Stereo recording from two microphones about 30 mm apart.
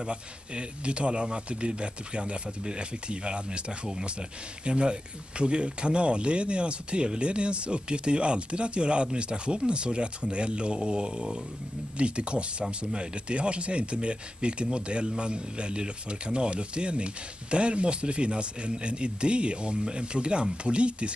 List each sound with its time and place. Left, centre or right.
0.0 s speech: right